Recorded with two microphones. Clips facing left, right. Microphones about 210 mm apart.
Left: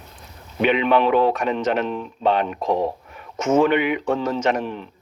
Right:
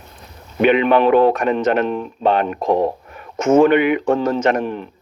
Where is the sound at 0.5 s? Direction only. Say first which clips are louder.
Right 4 dB; 55° right (ahead or behind).